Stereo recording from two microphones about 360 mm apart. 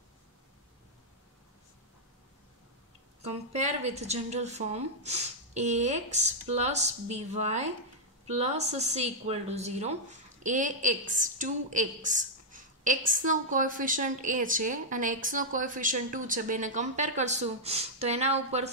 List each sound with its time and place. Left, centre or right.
3.2 s a woman's voice: centre